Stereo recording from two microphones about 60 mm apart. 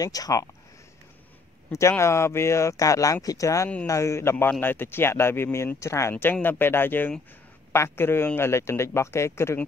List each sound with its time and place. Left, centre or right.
0.0 s speech: left
1.7 s speech: left
4.5 s speech: left
6.4 s speech: left